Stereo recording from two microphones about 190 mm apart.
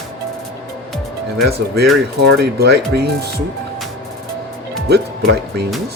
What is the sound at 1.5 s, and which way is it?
Speech, 60° right (ahead or behind).